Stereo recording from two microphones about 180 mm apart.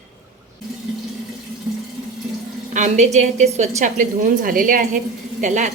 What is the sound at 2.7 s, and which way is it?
A woman's voice, 40° right (ahead or behind).